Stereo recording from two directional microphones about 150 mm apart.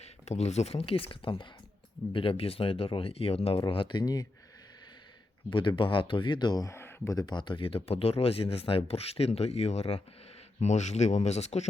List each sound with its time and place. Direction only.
0.0 s speech: 45° left (ahead or behind); by 4.3 s 25° left (ahead or behind)
5.5 s speech: 35° left (ahead or behind)